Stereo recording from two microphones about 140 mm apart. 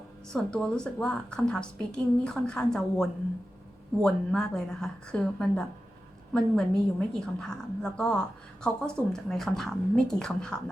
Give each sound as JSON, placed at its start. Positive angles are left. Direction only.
{"t": 0.3, "sound": "a woman's voice", "side_deg": 5}